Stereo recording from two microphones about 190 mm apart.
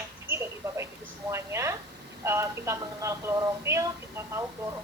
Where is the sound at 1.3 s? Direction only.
15° right (ahead or behind).